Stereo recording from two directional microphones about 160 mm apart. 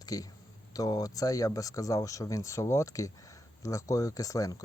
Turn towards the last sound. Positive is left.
turn(degrees=20)  # may be behind; listen again after turning